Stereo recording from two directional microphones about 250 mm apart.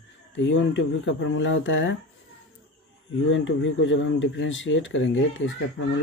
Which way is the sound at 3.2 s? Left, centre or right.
Left.